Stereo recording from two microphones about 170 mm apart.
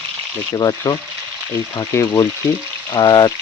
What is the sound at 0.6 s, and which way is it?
Speech, 20° left (ahead or behind).